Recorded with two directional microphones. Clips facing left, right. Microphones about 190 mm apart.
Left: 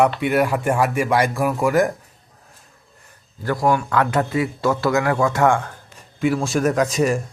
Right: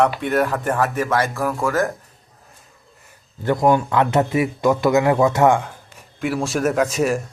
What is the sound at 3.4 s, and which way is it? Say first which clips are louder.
Speech: right 3 dB; 20° right (ahead or behind).